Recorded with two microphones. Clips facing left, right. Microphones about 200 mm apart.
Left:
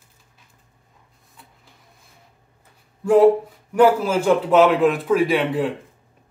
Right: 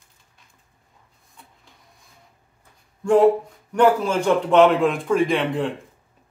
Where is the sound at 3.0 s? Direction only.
5° left (ahead or behind).